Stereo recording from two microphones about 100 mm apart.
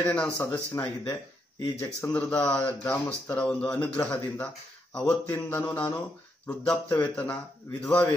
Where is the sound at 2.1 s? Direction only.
15° left (ahead or behind).